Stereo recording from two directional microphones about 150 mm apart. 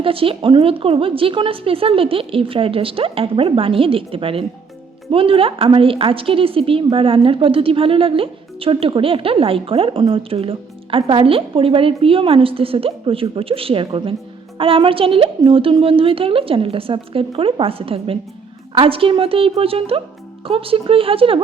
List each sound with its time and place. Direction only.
0.0 s a woman's voice: 35° right (ahead or behind)